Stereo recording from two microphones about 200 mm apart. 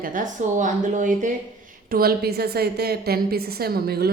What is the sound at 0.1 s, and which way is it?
A woman's voice, 40° right (ahead or behind).